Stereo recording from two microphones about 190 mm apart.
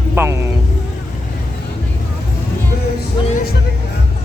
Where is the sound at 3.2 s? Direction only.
25° left (ahead or behind).